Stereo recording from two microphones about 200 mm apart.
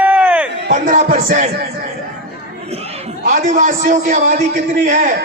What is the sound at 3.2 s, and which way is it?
A man's voice, 40° right (ahead or behind).